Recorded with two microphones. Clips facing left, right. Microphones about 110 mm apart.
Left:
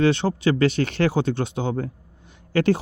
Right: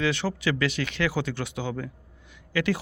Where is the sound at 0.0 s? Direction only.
30° left (ahead or behind).